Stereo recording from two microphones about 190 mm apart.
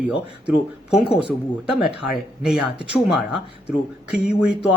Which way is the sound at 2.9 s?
5° right (ahead or behind).